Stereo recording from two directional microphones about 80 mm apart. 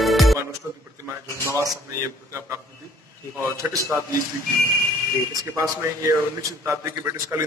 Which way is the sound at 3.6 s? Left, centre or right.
Centre.